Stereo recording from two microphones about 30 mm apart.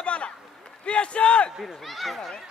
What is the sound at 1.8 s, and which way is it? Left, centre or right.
Speech, centre.